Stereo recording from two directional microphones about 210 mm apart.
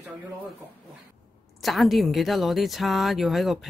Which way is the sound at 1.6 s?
Centre (ahead or behind).